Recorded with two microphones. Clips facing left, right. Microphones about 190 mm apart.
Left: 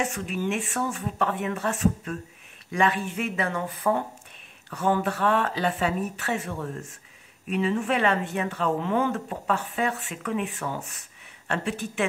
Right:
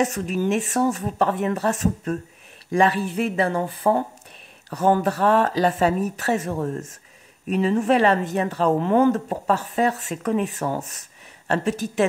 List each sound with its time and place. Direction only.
0.0 s speech: 40° right (ahead or behind)